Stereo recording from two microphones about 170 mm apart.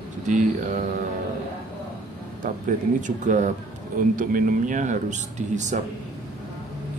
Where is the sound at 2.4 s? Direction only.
50° right (ahead or behind).